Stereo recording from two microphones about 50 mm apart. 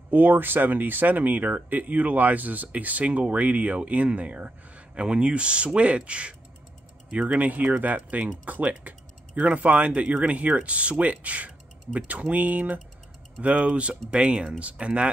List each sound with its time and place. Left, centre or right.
0.1 s speech: right